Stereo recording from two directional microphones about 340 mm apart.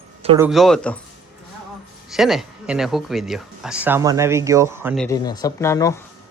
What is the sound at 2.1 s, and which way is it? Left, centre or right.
Speech, centre.